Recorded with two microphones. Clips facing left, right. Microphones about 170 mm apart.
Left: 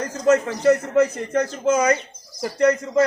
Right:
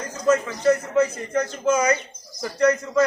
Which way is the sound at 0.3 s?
40° left (ahead or behind).